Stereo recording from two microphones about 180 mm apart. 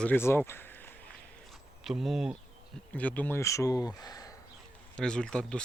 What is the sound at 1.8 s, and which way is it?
Speech, centre (ahead or behind).